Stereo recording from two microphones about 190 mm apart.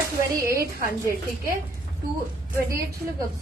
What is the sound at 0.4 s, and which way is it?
Speech, 50° right (ahead or behind).